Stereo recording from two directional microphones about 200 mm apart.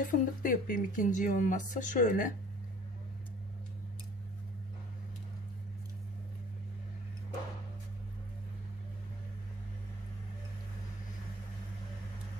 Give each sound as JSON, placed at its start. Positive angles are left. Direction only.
{"t": 0.0, "sound": "speech", "side_deg": 45}